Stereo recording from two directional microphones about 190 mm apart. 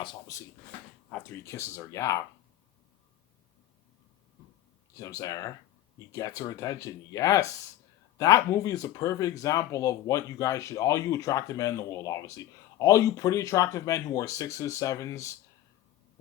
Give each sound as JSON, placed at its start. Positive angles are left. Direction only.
{"t": 0.0, "sound": "speech", "side_deg": 20}
{"t": 4.9, "sound": "speech", "side_deg": 15}